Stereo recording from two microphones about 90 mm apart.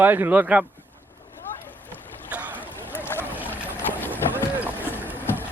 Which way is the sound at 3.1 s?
30° left (ahead or behind).